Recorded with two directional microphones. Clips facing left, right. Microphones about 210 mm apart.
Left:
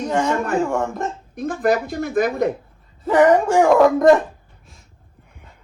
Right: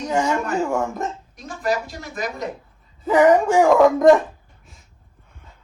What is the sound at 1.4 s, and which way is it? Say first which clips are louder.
Speech: left 6 dB; 55° left (ahead or behind).